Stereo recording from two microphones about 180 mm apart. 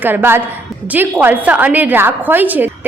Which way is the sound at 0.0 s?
10° right (ahead or behind).